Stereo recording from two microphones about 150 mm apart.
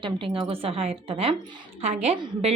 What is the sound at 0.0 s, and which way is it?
A woman's voice, 35° right (ahead or behind).